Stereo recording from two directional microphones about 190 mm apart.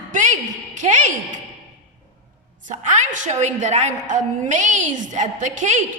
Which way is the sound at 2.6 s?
40° right (ahead or behind).